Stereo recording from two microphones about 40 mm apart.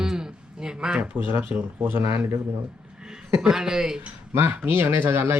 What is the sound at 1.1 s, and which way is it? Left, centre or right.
Speech, right.